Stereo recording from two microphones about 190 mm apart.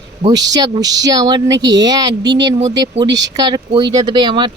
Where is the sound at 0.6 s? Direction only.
20° right (ahead or behind).